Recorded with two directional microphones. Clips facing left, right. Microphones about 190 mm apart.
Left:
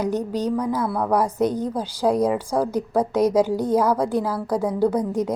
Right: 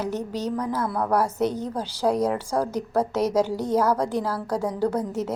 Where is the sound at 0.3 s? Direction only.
10° left (ahead or behind).